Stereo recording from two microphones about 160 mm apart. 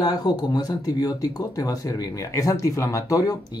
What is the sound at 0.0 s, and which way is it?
Speech, 25° left (ahead or behind).